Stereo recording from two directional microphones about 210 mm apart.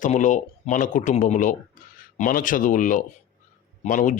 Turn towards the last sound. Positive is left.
turn(degrees=40)  # may be behind; listen again after turning